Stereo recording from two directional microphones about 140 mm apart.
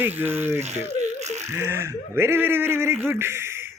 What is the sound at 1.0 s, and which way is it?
Laughter, 55° right (ahead or behind).